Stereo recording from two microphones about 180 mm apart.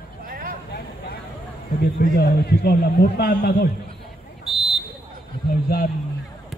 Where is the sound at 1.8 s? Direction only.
60° left (ahead or behind).